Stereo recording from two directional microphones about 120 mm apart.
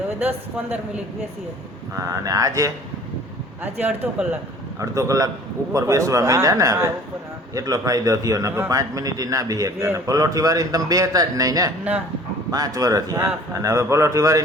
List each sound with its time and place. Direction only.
0.2 s speech: 15° right (ahead or behind)
1.9 s a man's voice: 25° right (ahead or behind)
3.6 s speech: 15° right (ahead or behind)
4.8 s a man's voice: 25° right (ahead or behind)